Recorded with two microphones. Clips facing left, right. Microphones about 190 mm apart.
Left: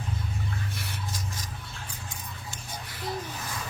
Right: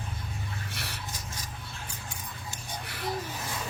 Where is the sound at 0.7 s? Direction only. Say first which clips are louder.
Left 2 dB; 70° right (ahead or behind).